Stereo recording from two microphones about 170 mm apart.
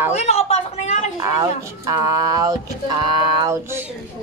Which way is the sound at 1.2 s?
20° right (ahead or behind).